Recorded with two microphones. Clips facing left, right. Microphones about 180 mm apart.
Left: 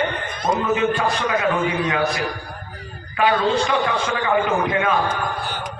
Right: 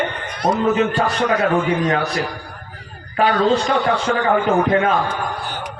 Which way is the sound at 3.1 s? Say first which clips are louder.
Right 3 dB; 40° right (ahead or behind).